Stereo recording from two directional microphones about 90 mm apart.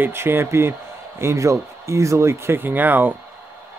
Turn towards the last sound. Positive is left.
turn(degrees=-20)  # may be behind; listen again after turning